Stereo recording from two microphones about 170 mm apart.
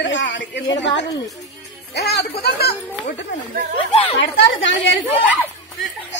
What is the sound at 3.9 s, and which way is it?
Speech, 35° left (ahead or behind).